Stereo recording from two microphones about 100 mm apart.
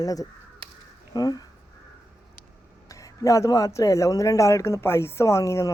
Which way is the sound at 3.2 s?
35° left (ahead or behind).